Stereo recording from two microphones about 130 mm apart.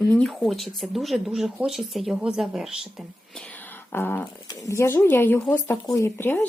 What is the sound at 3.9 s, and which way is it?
Speech, 15° left (ahead or behind).